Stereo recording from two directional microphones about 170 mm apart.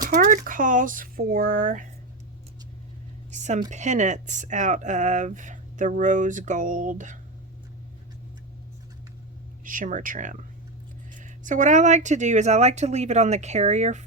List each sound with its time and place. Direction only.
0.0 s speech: 50° right (ahead or behind)
3.3 s a woman's voice: 45° right (ahead or behind)
9.6 s speech: 50° right (ahead or behind)